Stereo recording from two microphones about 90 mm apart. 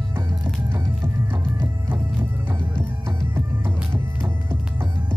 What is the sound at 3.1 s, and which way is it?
Music, 25° right (ahead or behind).